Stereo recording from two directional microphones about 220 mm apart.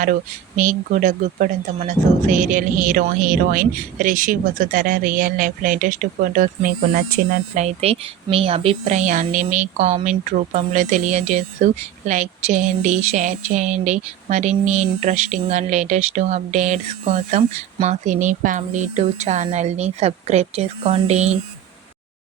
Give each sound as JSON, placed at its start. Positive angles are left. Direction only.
{"t": 0.0, "sound": "speech", "side_deg": -35}